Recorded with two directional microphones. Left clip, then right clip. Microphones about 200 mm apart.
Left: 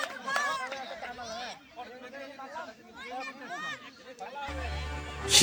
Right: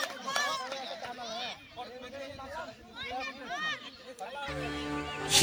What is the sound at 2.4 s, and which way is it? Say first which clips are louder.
Chatter: left 1 dB; 30° right (ahead or behind).